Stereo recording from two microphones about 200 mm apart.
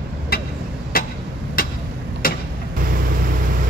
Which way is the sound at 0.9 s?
45° left (ahead or behind).